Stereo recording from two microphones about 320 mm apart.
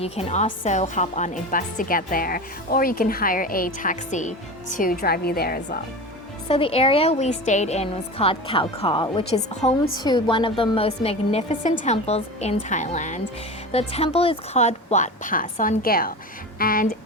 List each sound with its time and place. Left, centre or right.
0.0 s a woman's voice: centre
6.5 s a woman's voice: centre